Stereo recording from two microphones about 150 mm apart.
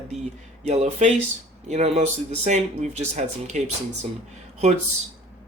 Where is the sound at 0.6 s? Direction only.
50° right (ahead or behind).